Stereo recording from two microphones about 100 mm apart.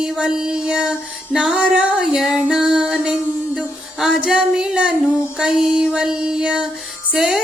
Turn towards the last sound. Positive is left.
turn(degrees=-5)  # may be behind; listen again after turning